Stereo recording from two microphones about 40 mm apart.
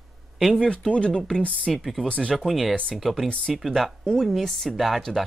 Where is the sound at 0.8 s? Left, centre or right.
Left.